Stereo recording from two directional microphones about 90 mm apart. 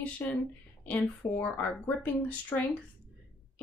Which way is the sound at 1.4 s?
20° left (ahead or behind).